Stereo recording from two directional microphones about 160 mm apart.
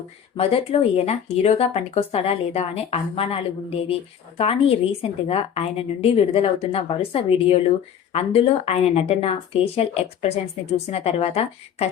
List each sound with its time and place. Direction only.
0.3 s speech: 40° left (ahead or behind)